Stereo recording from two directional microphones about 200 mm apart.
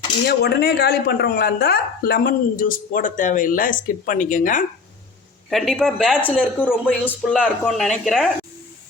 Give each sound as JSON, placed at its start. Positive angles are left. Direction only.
{"t": 0.3, "sound": "speech", "side_deg": 55}
{"t": 5.5, "sound": "speech", "side_deg": 0}